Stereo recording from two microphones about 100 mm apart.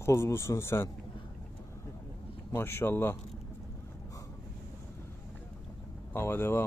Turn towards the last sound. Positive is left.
turn(degrees=25)  # may be behind; listen again after turning